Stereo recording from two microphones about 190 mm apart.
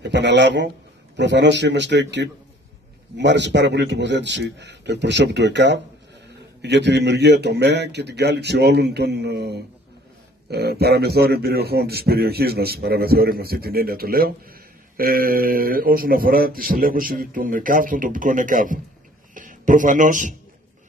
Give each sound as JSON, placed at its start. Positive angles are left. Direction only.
{"t": 0.0, "sound": "a man's voice", "side_deg": -65}